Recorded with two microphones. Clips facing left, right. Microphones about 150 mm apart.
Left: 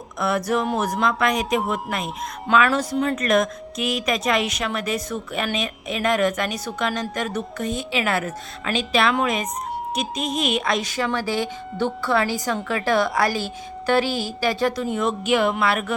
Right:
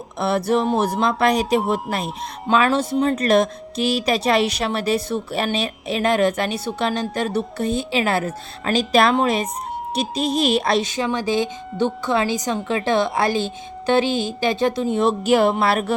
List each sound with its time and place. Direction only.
0.2 s speech: 30° right (ahead or behind)
10.8 s a woman's voice: 20° right (ahead or behind)
14.9 s speech: 35° right (ahead or behind)